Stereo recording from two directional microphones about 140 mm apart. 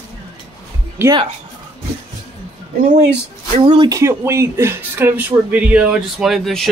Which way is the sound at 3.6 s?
40° right (ahead or behind).